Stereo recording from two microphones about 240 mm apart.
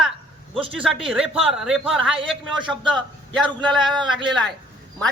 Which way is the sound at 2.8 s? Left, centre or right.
Centre.